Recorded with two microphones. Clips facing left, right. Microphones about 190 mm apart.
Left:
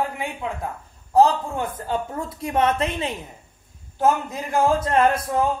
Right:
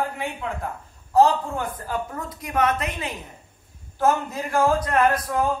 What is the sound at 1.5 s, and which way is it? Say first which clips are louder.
A man's voice: left 2 dB; 25° left (ahead or behind).